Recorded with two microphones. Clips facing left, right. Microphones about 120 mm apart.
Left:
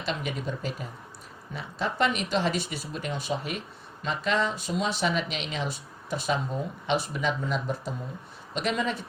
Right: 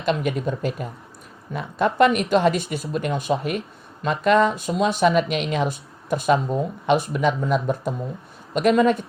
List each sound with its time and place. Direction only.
0.0 s speech: 55° right (ahead or behind)